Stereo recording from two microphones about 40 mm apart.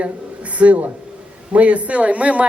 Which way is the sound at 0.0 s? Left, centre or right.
Right.